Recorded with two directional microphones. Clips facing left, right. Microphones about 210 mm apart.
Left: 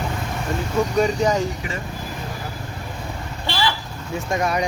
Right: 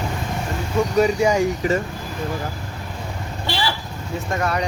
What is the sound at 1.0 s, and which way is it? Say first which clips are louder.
Speech: right 3 dB; 10° right (ahead or behind).